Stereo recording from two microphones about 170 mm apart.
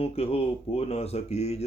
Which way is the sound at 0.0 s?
35° left (ahead or behind).